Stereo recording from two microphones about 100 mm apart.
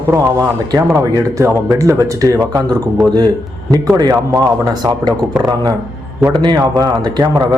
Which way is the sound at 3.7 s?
40° right (ahead or behind).